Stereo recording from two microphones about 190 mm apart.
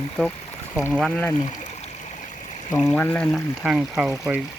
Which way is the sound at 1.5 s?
40° left (ahead or behind).